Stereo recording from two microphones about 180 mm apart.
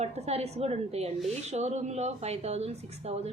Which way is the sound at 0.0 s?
35° right (ahead or behind).